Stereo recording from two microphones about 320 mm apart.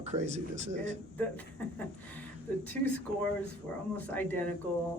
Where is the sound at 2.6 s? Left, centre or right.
Centre.